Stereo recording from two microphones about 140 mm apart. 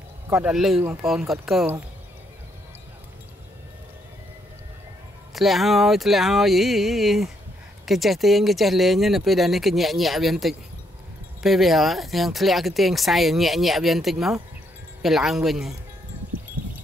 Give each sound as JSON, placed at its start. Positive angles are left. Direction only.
{"t": 0.3, "sound": "speech", "side_deg": -10}
{"t": 5.3, "sound": "speech", "side_deg": 0}